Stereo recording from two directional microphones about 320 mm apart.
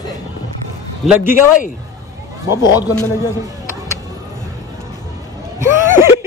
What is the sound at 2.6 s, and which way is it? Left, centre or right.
Speech, centre.